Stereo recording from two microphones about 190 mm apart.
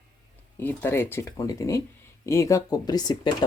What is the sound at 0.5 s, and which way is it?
Speech, 10° left (ahead or behind).